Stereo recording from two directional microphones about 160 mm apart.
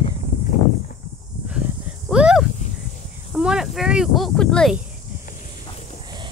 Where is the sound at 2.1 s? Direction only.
5° right (ahead or behind).